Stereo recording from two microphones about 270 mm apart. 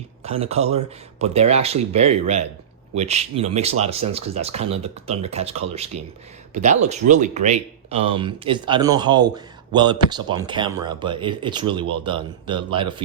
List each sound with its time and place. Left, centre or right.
0.2 s speech: right